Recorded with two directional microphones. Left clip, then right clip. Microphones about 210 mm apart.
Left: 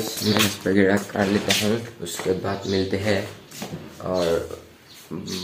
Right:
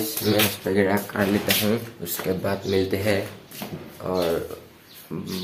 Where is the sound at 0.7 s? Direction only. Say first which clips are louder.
Left 2 dB; 5° right (ahead or behind).